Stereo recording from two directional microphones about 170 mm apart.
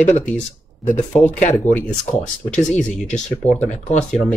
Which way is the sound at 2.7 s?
45° left (ahead or behind).